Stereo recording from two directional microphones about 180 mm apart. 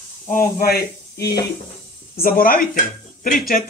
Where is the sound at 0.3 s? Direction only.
50° left (ahead or behind).